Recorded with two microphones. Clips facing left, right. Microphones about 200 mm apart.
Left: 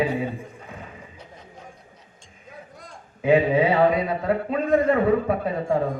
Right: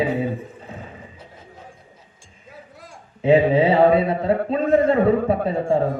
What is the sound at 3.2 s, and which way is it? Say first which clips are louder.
A man's voice: right 3 dB; 30° right (ahead or behind).